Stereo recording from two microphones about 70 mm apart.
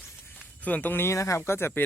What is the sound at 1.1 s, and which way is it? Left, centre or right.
Speech, left.